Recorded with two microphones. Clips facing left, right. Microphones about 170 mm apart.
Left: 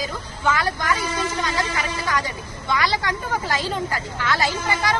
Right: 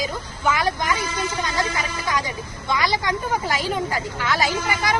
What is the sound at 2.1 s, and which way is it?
A woman's voice, 15° right (ahead or behind).